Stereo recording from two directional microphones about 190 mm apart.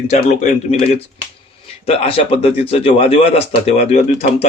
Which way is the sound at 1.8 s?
30° left (ahead or behind).